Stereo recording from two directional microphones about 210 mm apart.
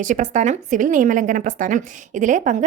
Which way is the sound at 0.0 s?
35° right (ahead or behind).